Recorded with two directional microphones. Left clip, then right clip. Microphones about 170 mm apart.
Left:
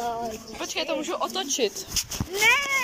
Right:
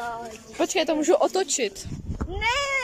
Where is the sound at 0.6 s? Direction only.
60° right (ahead or behind).